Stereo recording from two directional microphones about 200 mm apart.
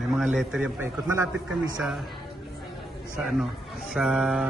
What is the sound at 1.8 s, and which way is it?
Mantra, centre (ahead or behind).